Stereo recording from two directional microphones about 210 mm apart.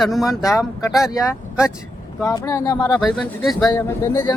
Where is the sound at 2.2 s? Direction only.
15° left (ahead or behind).